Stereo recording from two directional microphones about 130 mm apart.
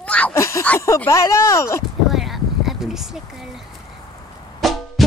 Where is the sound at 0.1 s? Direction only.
10° left (ahead or behind).